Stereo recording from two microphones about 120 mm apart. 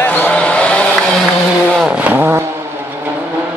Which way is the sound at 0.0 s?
15° left (ahead or behind).